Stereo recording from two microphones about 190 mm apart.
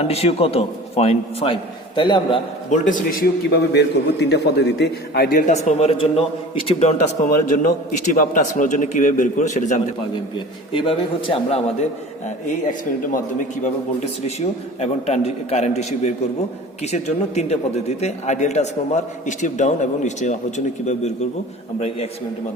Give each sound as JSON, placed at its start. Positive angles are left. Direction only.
{"t": 0.0, "sound": "a man's voice", "side_deg": 30}
{"t": 2.6, "sound": "a man's voice", "side_deg": 40}
{"t": 10.3, "sound": "a man's voice", "side_deg": 30}
{"t": 14.0, "sound": "a man's voice", "side_deg": 35}
{"t": 21.8, "sound": "a man's voice", "side_deg": 35}